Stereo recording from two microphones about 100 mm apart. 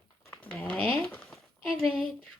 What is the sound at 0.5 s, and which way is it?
Speech, 15° left (ahead or behind).